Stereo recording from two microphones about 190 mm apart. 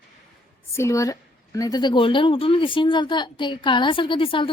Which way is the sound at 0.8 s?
15° left (ahead or behind).